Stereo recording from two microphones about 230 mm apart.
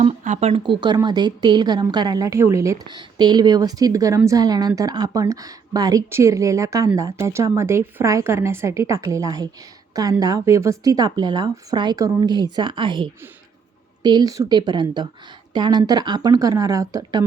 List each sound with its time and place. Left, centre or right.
0.0 s a woman's voice: right